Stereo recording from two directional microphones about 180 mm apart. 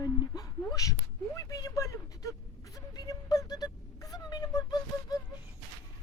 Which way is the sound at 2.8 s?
20° left (ahead or behind).